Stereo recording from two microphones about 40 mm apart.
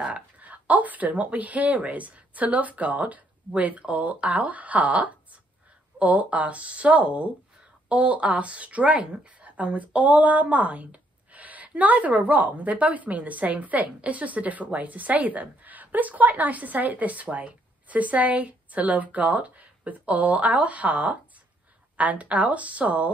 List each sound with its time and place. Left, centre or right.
0.4 s a woman's voice: right